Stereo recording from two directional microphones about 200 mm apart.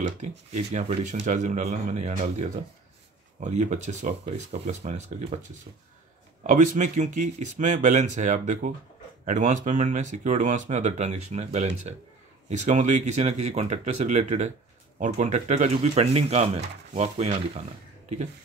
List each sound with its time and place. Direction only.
0.7 s speech: 35° right (ahead or behind)
6.4 s speech: 40° right (ahead or behind)